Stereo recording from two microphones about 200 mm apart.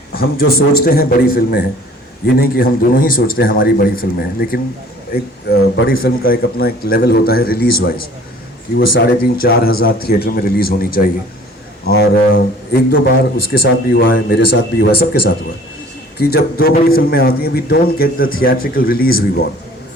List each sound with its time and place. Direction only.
0.1 s a man's voice: 50° left (ahead or behind)
12.0 s a man's voice: 50° left (ahead or behind)
16.1 s a man's voice: 50° left (ahead or behind)